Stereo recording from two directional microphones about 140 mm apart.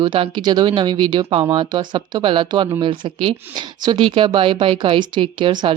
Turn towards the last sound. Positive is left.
turn(degrees=-35)  # may be behind; listen again after turning